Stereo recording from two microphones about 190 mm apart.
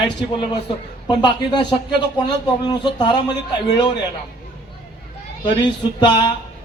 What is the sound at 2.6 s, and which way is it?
Speech, 20° left (ahead or behind).